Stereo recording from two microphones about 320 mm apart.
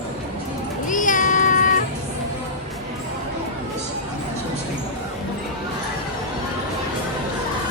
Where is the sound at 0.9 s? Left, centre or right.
Left.